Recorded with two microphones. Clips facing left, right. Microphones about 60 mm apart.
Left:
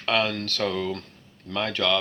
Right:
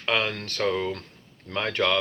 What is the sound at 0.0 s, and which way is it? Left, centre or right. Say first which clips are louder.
Speech: left 2 dB; right.